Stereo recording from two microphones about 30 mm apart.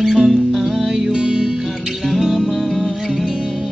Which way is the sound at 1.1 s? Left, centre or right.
Right.